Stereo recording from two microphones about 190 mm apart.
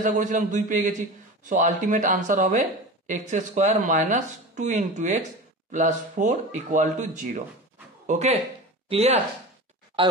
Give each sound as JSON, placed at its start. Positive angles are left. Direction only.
{"t": 0.0, "sound": "a man's voice", "side_deg": -40}